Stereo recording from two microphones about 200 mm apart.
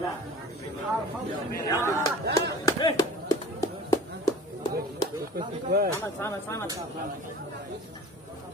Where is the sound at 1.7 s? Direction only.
15° left (ahead or behind).